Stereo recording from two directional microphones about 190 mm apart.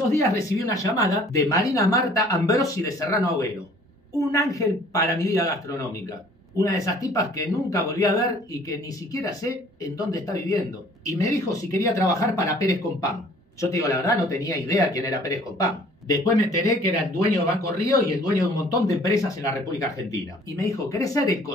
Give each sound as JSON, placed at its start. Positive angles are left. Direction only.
{"t": 0.1, "sound": "speech", "side_deg": 15}